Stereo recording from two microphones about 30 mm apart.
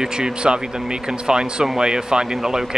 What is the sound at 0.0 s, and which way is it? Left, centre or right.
Speech, right.